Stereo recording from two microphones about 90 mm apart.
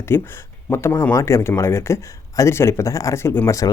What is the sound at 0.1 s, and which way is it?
Speech, 25° left (ahead or behind).